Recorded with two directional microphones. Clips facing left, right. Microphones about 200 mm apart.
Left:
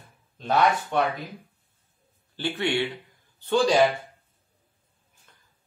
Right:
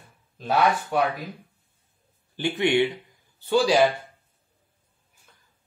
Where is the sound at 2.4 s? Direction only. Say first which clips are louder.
Right 5 dB; 15° right (ahead or behind).